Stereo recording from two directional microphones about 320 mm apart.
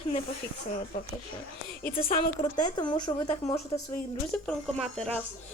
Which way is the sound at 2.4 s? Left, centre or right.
Centre.